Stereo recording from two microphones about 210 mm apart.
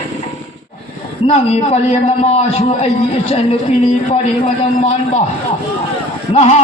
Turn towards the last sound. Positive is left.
turn(degrees=30)  # may be behind; listen again after turning